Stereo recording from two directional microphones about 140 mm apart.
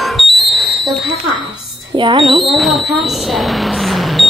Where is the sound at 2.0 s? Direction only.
35° right (ahead or behind).